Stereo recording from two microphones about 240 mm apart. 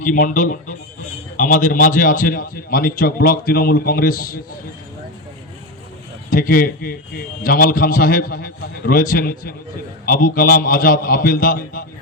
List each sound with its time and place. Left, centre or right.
0.0 s a man's voice: left
6.3 s a man's voice: left